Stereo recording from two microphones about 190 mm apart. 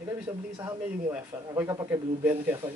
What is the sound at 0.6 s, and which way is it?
Speech, 15° right (ahead or behind).